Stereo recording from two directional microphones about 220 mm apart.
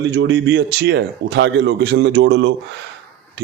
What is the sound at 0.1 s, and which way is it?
A man's voice, 55° right (ahead or behind).